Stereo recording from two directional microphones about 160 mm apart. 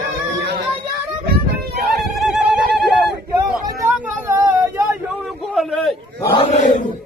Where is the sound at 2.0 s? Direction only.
Centre (ahead or behind).